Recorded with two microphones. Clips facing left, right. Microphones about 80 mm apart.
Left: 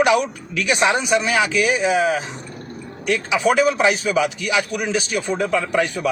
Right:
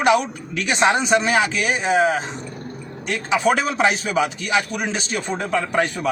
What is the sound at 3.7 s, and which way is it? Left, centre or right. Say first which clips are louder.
Speech: left 1 dB; right.